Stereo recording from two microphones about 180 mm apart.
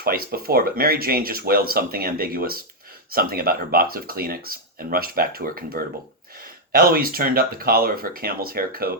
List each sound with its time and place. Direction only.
0.0 s speech: 55° right (ahead or behind)